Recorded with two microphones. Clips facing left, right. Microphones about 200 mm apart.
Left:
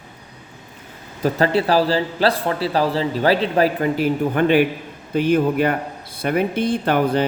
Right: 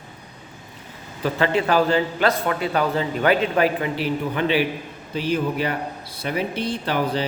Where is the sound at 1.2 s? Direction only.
35° left (ahead or behind).